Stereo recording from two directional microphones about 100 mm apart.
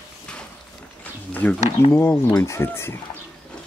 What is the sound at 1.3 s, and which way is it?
Speech, 15° left (ahead or behind).